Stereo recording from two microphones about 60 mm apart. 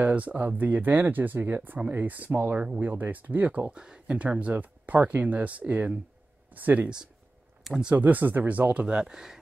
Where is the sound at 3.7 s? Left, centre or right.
Centre.